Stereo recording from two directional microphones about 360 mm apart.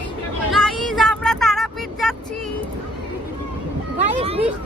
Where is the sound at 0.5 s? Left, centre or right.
Centre.